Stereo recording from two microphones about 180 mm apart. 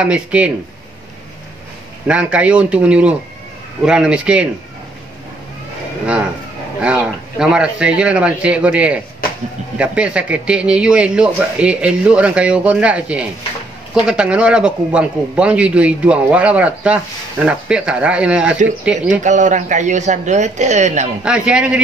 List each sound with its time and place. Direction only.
0.0 s a man's voice: 5° right (ahead or behind)
2.0 s a man's voice: 5° right (ahead or behind)
6.8 s a man's voice: 5° right (ahead or behind)
19.2 s a man's voice: 45° right (ahead or behind)
21.2 s speech: 5° right (ahead or behind)